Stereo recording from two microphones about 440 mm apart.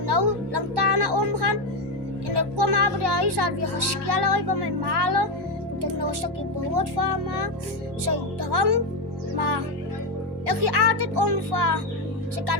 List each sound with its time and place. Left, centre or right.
0.1 s music: right
2.3 s speech: right
9.3 s music: right
10.4 s speech: right